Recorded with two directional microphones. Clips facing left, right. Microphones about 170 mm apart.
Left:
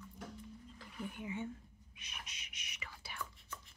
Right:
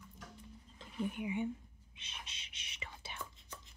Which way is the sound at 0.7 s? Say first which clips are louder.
Right 7 dB; 20° right (ahead or behind).